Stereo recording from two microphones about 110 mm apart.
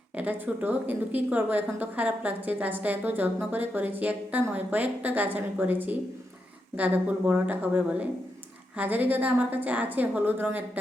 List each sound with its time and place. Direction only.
0.2 s a woman's voice: 15° right (ahead or behind)